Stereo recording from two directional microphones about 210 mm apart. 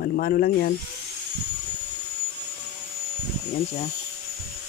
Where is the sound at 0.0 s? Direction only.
45° left (ahead or behind).